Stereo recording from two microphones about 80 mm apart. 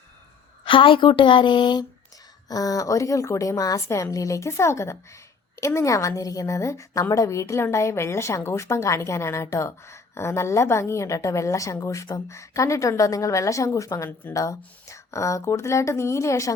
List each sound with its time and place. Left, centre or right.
0.6 s speech: left
2.5 s a woman's voice: left